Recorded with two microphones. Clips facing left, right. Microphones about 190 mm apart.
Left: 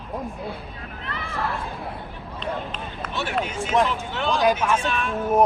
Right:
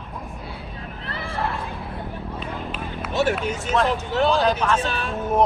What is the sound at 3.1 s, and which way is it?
Speech, 45° right (ahead or behind).